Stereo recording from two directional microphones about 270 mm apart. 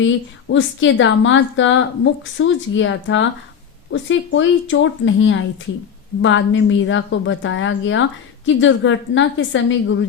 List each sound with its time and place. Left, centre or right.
0.0 s a woman's voice: left